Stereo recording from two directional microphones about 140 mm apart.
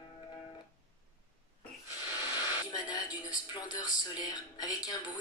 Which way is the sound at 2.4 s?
30° left (ahead or behind).